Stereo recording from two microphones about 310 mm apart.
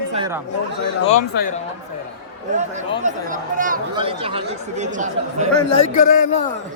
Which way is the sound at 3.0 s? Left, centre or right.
Right.